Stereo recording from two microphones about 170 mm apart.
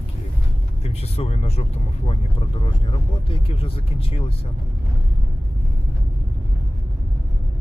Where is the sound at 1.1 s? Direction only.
40° left (ahead or behind).